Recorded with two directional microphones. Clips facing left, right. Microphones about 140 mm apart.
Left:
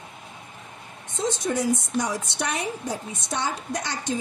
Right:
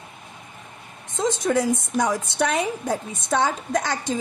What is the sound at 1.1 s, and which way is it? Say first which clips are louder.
Speech: right 4 dB; 90° right.